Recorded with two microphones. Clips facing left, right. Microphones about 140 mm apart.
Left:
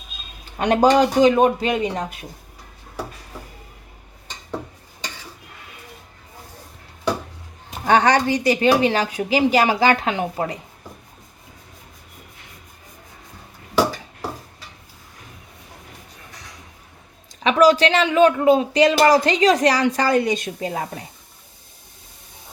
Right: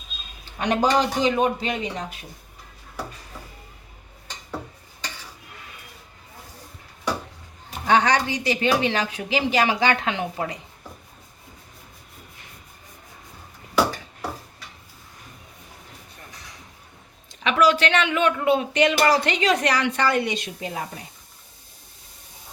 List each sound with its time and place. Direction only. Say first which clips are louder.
0.6 s speech: left 5 dB; 50° left (ahead or behind)
7.9 s speech: left 3 dB; 45° left (ahead or behind)
17.4 s speech: left 5 dB; 35° left (ahead or behind)